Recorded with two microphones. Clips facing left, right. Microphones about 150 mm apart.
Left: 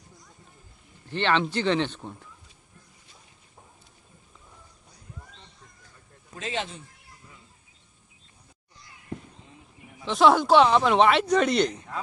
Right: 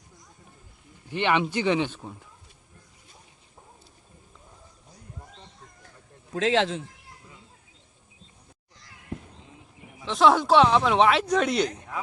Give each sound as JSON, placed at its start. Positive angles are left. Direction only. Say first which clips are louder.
{"t": 1.0, "sound": "speech", "louder": "even", "side_deg": -10}
{"t": 6.3, "sound": "speech", "louder": "right 9 dB", "side_deg": -90}
{"t": 8.7, "sound": "a sound", "louder": "left 2 dB", "side_deg": -90}
{"t": 10.0, "sound": "speech", "louder": "left 1 dB", "side_deg": 0}